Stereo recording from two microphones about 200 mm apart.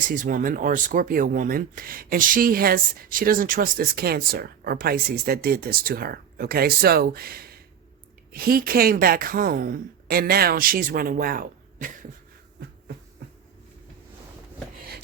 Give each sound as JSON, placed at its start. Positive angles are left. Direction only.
{"t": 0.1, "sound": "speech", "side_deg": -40}